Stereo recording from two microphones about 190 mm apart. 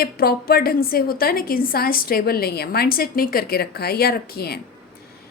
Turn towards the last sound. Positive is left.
turn(degrees=55)  # may be behind; listen again after turning